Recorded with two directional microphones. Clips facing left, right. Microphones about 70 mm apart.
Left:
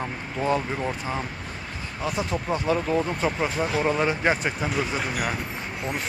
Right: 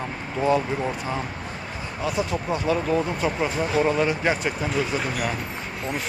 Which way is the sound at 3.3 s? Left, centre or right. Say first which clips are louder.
Right 1 dB; centre.